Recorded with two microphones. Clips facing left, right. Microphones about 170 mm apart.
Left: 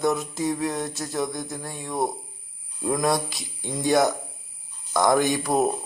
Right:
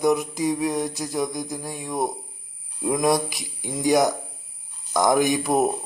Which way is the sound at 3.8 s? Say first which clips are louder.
Right 1 dB; 20° right (ahead or behind).